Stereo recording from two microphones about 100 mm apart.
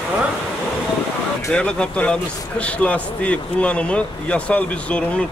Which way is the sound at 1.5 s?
10° left (ahead or behind).